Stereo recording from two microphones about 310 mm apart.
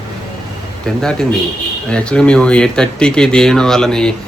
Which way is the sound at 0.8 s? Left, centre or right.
Centre.